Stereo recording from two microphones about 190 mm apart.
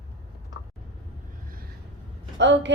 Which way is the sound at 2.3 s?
70° right (ahead or behind).